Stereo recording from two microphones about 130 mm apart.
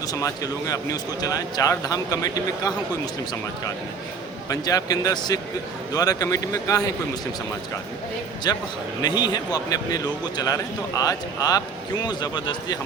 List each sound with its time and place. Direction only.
0.1 s speech: 25° left (ahead or behind)
4.4 s speech: 30° left (ahead or behind)
8.5 s speech: 30° left (ahead or behind)